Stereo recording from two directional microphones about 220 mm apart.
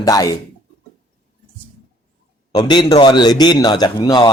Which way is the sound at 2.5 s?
20° left (ahead or behind).